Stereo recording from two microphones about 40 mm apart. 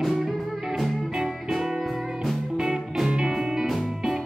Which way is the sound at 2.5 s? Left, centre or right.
Centre.